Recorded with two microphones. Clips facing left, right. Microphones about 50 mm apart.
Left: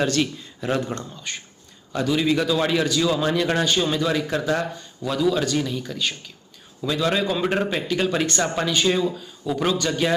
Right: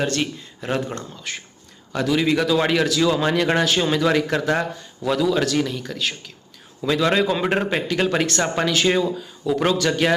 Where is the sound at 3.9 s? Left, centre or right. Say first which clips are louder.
Right 3 dB; right.